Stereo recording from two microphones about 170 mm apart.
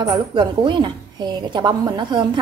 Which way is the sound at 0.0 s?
30° right (ahead or behind).